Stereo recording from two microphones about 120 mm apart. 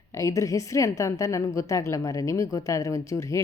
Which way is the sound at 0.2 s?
25° left (ahead or behind).